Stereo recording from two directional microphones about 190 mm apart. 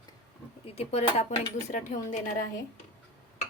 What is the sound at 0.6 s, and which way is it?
Speech, 35° left (ahead or behind).